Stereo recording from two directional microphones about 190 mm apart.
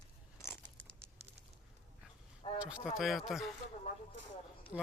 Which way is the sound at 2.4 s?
30° left (ahead or behind).